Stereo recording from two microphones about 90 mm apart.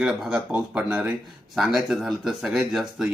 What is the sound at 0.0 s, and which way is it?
Speech, 5° right (ahead or behind).